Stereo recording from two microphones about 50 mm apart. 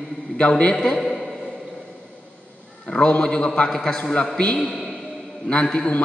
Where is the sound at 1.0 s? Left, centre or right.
Centre.